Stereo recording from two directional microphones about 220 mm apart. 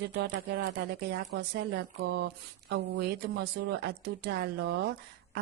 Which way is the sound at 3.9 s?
50° right (ahead or behind).